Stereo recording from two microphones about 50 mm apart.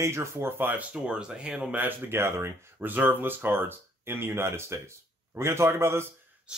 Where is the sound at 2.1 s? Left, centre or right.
Right.